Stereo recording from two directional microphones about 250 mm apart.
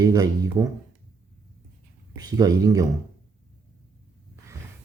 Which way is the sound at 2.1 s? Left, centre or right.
Centre.